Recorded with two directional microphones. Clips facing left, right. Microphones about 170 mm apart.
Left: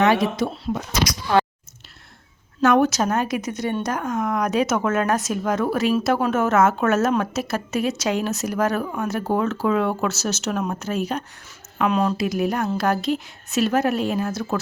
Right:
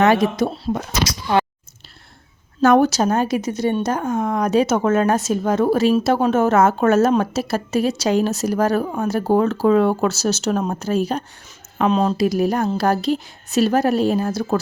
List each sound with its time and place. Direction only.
0.0 s speech: 45° right (ahead or behind)
1.0 s a sound: 20° right (ahead or behind)
2.6 s speech: 35° right (ahead or behind)
12.2 s speech: 35° right (ahead or behind)